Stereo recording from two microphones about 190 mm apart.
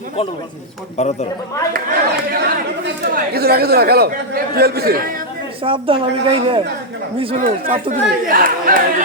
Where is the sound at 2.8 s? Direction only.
55° right (ahead or behind).